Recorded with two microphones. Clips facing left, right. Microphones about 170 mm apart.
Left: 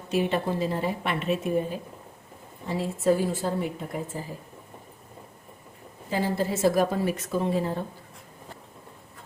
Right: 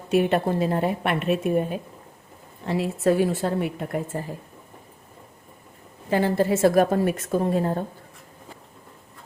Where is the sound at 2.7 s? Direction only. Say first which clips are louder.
Right 2 dB; 70° right (ahead or behind).